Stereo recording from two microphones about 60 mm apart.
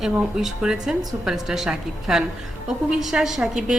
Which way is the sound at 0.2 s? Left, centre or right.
Centre.